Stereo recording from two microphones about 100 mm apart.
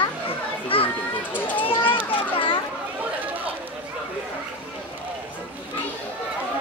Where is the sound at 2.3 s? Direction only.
60° left (ahead or behind).